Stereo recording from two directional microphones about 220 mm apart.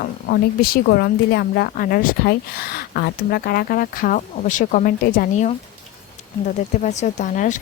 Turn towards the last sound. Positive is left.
turn(degrees=35)  # may be behind; listen again after turning